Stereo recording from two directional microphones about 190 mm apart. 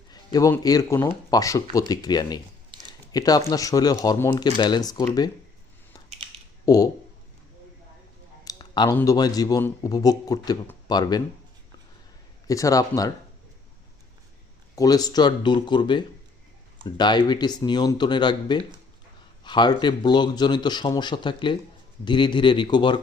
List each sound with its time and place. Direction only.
0.1 s a man's voice: 20° left (ahead or behind)
6.7 s a man's voice: 20° left (ahead or behind)
8.4 s a sound: 25° left (ahead or behind)
8.9 s a man's voice: 15° left (ahead or behind)
12.5 s speech: 15° left (ahead or behind)
14.8 s a man's voice: 20° left (ahead or behind)